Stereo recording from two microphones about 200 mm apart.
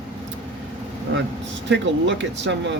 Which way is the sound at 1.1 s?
75° right (ahead or behind).